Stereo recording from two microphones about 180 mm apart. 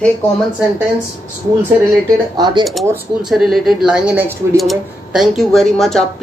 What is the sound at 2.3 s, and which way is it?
Speech, 25° right (ahead or behind).